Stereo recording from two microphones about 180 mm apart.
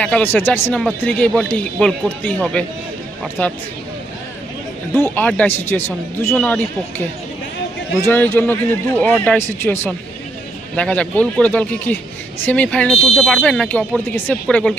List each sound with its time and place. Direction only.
0.0 s speech: 10° left (ahead or behind)
5.0 s speech: 10° left (ahead or behind)
8.0 s speech: 10° left (ahead or behind)